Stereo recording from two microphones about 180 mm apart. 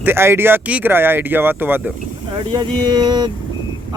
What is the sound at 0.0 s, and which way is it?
Speech, 15° right (ahead or behind).